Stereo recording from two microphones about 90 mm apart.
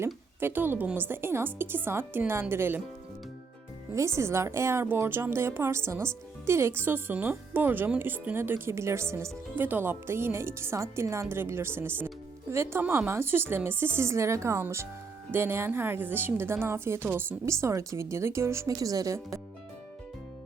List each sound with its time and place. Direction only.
0.0 s a woman's voice: 25° right (ahead or behind)
3.9 s a woman's voice: 30° right (ahead or behind)